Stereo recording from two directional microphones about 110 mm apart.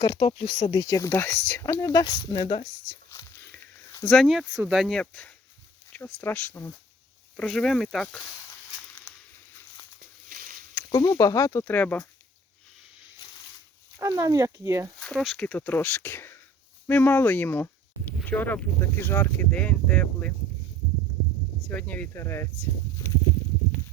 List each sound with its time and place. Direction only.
0.0 s speech: 45° left (ahead or behind); by 1.8 s 20° left (ahead or behind)
1.8 s speech: 35° left (ahead or behind); by 3.0 s 55° left (ahead or behind)
4.1 s speech: centre (ahead or behind)
5.9 s speech: 20° left (ahead or behind)
7.3 s speech: 5° left (ahead or behind)
10.8 s speech: 40° left (ahead or behind)
11.6 s speech: 15° left (ahead or behind)
14.0 s speech: 30° right (ahead or behind)
14.9 s speech: 5° left (ahead or behind)
21.7 s speech: 15° left (ahead or behind)